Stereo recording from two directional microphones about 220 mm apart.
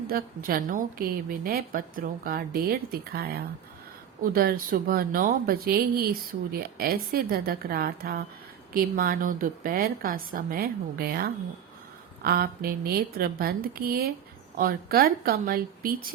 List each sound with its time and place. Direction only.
0.1 s a woman's voice: 40° right (ahead or behind)